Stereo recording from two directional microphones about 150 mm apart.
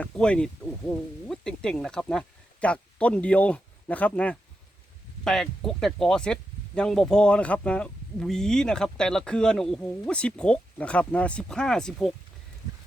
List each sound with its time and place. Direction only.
0.0 s speech: 5° left (ahead or behind)